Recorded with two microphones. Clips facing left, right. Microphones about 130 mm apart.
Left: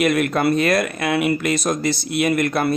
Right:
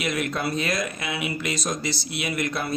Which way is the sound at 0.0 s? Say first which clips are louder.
Left 9 dB; 55° left (ahead or behind).